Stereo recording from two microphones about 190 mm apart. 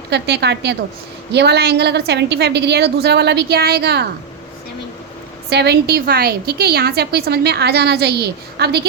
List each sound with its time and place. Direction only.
0.1 s a woman's voice: 60° right (ahead or behind)
5.5 s a woman's voice: 60° right (ahead or behind)